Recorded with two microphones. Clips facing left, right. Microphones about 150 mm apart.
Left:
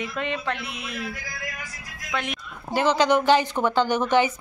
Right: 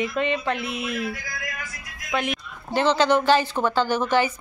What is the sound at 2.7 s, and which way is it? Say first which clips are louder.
A woman's voice: right 1 dB; 10° left (ahead or behind).